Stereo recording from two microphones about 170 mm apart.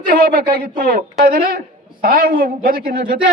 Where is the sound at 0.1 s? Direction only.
65° right (ahead or behind).